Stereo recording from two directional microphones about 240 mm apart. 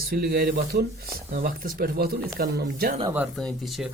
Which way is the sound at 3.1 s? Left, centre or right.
Centre.